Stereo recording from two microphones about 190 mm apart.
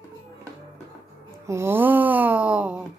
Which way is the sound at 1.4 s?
15° right (ahead or behind).